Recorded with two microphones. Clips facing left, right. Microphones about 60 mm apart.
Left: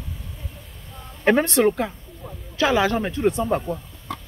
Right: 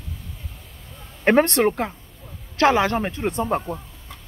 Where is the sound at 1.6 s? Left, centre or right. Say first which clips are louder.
Left 1 dB; right.